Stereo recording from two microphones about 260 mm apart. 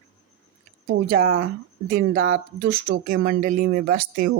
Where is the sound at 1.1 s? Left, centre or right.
Right.